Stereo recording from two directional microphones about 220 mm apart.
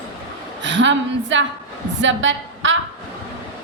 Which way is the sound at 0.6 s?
55° right (ahead or behind).